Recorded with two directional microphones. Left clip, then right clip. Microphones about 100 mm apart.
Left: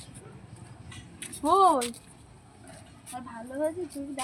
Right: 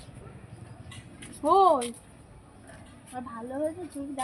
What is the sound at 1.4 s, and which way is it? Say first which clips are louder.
Speech: right 1 dB; 20° right (ahead or behind).